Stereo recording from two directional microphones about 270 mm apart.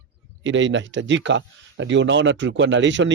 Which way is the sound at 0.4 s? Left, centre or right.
Right.